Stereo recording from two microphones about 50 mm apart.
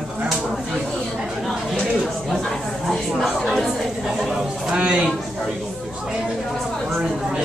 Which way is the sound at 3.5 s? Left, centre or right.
Centre.